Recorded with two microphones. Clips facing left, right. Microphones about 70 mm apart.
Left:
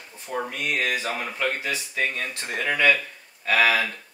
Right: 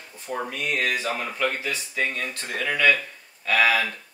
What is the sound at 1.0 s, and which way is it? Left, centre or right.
Speech, left.